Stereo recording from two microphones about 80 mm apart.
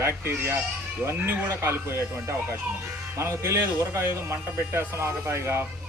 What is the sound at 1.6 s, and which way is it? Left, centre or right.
Speech, right.